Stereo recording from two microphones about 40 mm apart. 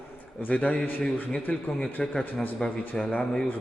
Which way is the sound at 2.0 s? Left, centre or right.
Left.